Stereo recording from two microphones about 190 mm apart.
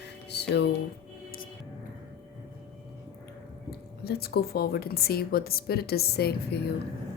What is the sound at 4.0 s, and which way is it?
A woman's voice, 55° left (ahead or behind).